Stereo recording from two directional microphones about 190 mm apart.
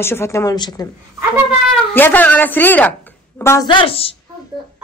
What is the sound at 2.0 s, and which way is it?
A woman's voice, 10° left (ahead or behind).